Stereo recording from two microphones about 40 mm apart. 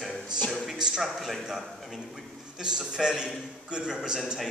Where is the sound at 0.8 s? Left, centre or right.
Centre.